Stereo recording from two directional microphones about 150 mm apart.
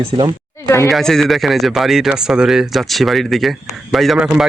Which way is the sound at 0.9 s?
Centre (ahead or behind).